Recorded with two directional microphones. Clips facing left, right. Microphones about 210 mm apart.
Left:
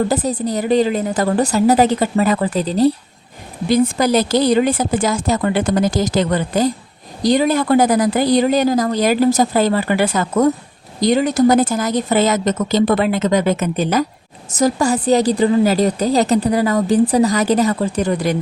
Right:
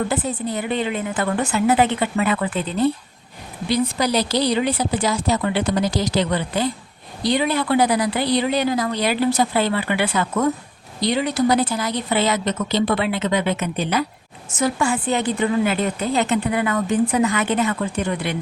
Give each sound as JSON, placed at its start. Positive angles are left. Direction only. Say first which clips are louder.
{"t": 0.1, "sound": "a woman's voice", "louder": "left 5 dB", "side_deg": 40}
{"t": 3.7, "sound": "a woman's voice", "louder": "left 6 dB", "side_deg": 50}